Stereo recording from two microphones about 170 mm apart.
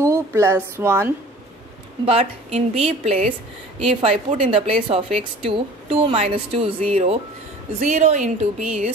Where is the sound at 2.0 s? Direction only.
35° right (ahead or behind).